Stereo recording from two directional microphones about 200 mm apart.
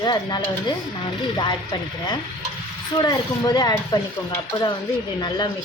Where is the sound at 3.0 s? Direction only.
20° left (ahead or behind).